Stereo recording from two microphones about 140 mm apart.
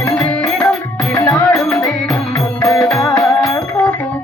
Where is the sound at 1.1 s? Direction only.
20° left (ahead or behind).